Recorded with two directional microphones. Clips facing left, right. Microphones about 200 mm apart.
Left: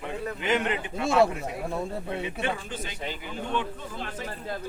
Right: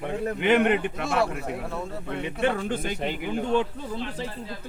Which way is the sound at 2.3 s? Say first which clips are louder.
Right 6 dB; 60° right (ahead or behind).